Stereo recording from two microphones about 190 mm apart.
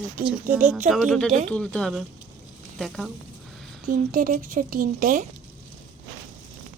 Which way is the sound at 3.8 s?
45° right (ahead or behind).